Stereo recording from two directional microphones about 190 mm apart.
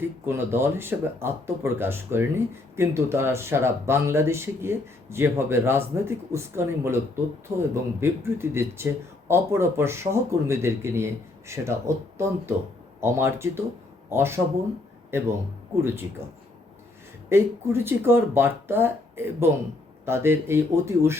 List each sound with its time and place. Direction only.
0.3 s speech: 10° right (ahead or behind)
17.2 s speech: 15° right (ahead or behind)